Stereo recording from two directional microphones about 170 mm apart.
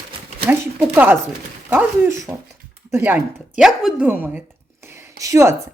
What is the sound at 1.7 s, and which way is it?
Speech, 10° right (ahead or behind).